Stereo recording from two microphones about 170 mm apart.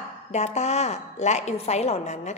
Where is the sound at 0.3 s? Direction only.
40° left (ahead or behind).